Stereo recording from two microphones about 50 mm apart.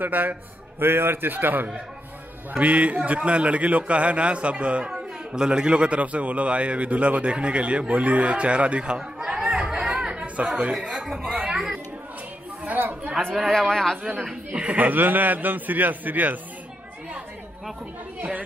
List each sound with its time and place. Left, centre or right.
0.0 s a man's voice: right
2.5 s a man's voice: right
10.2 s chatter: right
10.6 s speech: centre
12.7 s chatter: right
13.5 s speech: centre
14.5 s a man's voice: right